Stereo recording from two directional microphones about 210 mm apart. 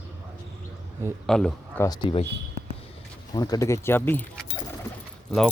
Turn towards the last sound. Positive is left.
turn(degrees=5)  # may be behind; listen again after turning